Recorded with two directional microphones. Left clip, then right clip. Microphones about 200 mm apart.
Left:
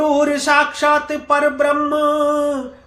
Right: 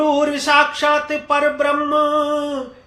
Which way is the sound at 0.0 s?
20° left (ahead or behind).